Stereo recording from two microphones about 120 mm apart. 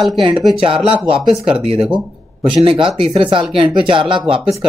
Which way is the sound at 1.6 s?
50° right (ahead or behind).